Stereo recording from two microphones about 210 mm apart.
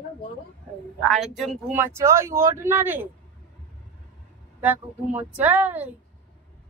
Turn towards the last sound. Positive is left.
turn(degrees=-10)  # may be behind; listen again after turning